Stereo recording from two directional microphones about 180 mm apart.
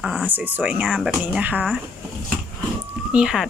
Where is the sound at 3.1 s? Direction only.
5° right (ahead or behind).